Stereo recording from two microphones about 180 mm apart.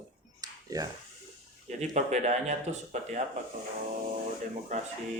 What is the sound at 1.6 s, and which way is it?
Speech, 40° right (ahead or behind).